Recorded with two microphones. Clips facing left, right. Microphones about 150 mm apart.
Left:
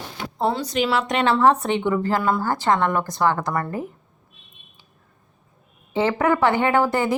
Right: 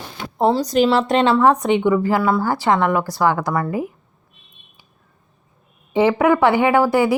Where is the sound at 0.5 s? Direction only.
40° right (ahead or behind).